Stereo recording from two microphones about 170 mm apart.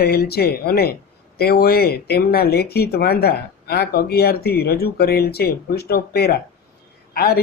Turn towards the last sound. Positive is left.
turn(degrees=65)  # may be behind; listen again after turning